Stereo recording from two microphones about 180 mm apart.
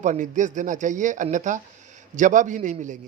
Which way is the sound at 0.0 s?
45° right (ahead or behind).